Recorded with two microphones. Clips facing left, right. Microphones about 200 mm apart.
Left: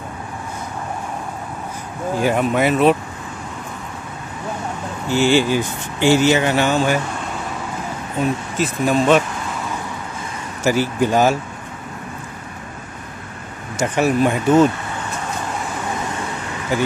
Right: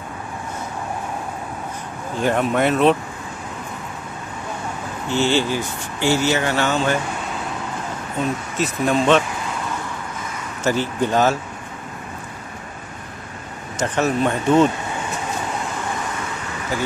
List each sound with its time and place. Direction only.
2.1 s speech: 5° left (ahead or behind)
5.1 s speech: 10° left (ahead or behind)
8.5 s speech: centre (ahead or behind)
10.6 s speech: 10° left (ahead or behind)
13.7 s speech: 10° left (ahead or behind)